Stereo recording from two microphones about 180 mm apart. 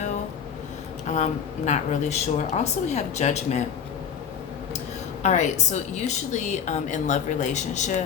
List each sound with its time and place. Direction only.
1.0 s a woman's voice: 40° left (ahead or behind)
5.2 s a woman's voice: 40° left (ahead or behind)